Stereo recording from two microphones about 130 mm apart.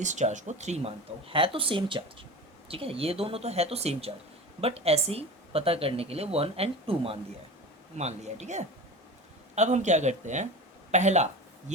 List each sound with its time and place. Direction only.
0.0 s speech: 65° right (ahead or behind)
1.3 s speech: 45° right (ahead or behind)
7.9 s speech: 60° right (ahead or behind)